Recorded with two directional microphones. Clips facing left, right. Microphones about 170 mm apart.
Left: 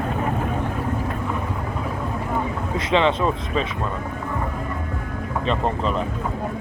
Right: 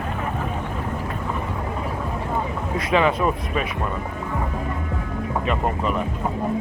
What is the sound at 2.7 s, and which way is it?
Speech, 25° left (ahead or behind).